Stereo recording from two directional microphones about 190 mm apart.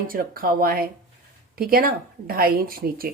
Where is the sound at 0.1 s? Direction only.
50° right (ahead or behind).